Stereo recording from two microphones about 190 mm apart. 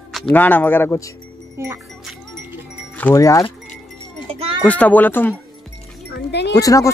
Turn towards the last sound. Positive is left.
turn(degrees=20)  # may be behind; listen again after turning